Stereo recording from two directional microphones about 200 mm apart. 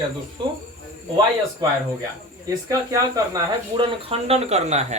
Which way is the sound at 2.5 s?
15° right (ahead or behind).